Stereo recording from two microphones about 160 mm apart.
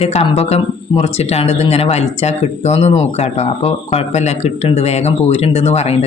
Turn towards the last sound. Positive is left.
turn(degrees=40)  # may be behind; listen again after turning